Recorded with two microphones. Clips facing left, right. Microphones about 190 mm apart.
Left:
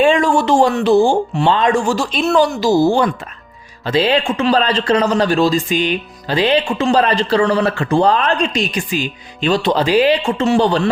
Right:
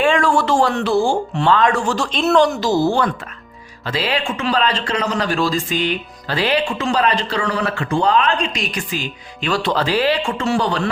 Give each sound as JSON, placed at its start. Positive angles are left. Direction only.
{"t": 0.0, "sound": "speech", "side_deg": 20}
{"t": 3.8, "sound": "speech", "side_deg": 25}
{"t": 8.9, "sound": "speech", "side_deg": 20}